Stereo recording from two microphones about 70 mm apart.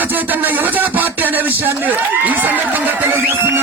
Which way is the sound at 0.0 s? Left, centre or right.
Right.